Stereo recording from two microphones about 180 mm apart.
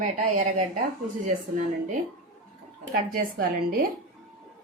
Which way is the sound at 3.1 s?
55° right (ahead or behind).